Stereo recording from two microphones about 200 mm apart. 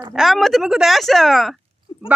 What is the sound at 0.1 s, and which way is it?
Speech, centre (ahead or behind).